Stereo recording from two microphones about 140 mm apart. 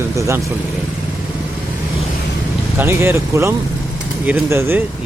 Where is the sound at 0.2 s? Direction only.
20° right (ahead or behind).